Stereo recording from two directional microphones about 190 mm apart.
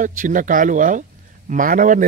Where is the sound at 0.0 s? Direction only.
45° right (ahead or behind).